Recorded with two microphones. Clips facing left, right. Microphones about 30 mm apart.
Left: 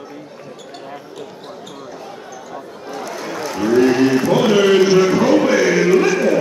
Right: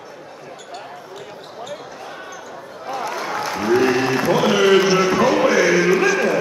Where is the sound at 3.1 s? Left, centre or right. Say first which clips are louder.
Even; centre.